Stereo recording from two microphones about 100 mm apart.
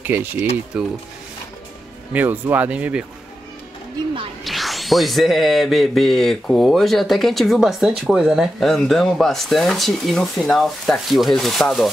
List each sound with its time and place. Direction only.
0.0 s speech: 20° right (ahead or behind)
0.7 s speech: 10° right (ahead or behind)
2.1 s speech: 20° right (ahead or behind)
4.5 s music: centre (ahead or behind)